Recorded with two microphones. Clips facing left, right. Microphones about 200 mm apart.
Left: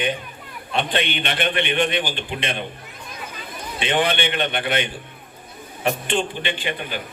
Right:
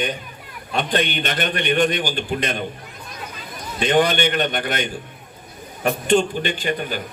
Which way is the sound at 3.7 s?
40° right (ahead or behind).